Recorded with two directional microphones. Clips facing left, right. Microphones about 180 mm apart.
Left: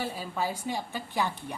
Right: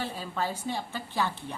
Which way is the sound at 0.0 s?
10° left (ahead or behind).